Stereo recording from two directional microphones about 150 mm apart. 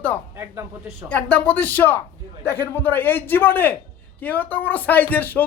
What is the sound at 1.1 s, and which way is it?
A man's voice, 10° left (ahead or behind).